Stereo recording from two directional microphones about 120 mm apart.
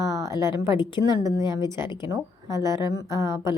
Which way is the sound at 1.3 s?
35° left (ahead or behind).